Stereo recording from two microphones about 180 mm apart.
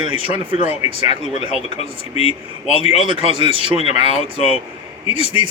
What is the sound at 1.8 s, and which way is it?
Speech, 35° left (ahead or behind).